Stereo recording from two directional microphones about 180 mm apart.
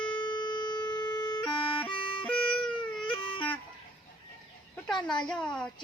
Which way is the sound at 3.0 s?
25° left (ahead or behind).